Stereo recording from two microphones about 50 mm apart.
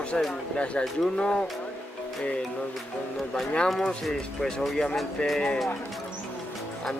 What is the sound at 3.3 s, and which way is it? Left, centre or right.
Speech, centre.